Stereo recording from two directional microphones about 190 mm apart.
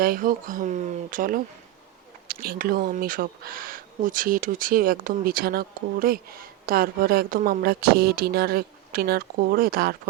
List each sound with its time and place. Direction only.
0.0 s speech: 50° right (ahead or behind)